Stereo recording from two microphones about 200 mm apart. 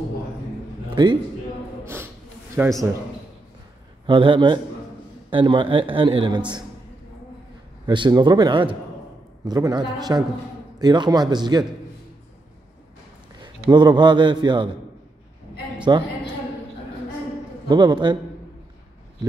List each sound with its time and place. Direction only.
1.0 s a man's voice: 25° right (ahead or behind)
2.6 s a man's voice: 10° right (ahead or behind)
4.0 s a man's voice: 25° right (ahead or behind)
7.8 s a man's voice: 20° right (ahead or behind)
13.4 s a man's voice: 20° right (ahead or behind)
15.9 s a man's voice: 20° right (ahead or behind)
17.6 s a man's voice: 20° right (ahead or behind)